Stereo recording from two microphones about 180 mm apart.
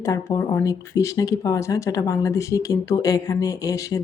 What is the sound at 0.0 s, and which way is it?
Speech, 15° left (ahead or behind).